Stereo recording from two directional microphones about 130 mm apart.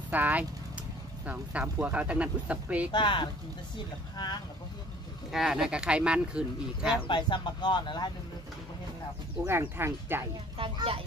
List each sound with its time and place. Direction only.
0.1 s speech: 10° right (ahead or behind)
2.9 s speech: 35° left (ahead or behind)
5.3 s speech: 5° right (ahead or behind)
7.1 s speech: 35° left (ahead or behind)
9.5 s speech: 15° right (ahead or behind)
10.6 s a child's voice: 45° right (ahead or behind)